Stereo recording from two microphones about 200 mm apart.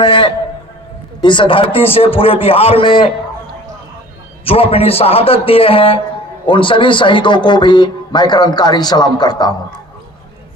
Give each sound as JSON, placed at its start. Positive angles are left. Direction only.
{"t": 0.0, "sound": "a man's voice", "side_deg": 25}
{"t": 4.4, "sound": "speech", "side_deg": 30}